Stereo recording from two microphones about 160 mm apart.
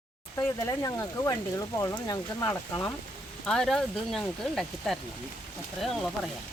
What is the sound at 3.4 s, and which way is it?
Speech, 5° left (ahead or behind).